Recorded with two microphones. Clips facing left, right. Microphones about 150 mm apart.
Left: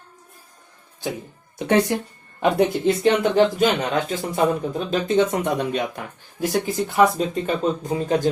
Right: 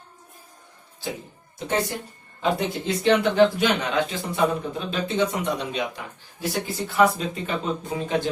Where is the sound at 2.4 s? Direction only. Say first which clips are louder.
Left 6 dB; 55° left (ahead or behind).